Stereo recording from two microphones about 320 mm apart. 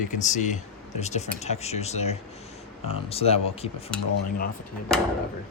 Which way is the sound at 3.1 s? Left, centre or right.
Centre.